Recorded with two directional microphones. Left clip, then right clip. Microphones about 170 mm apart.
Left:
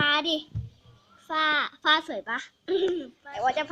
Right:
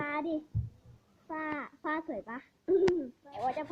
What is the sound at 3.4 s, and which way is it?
Speech, 20° left (ahead or behind).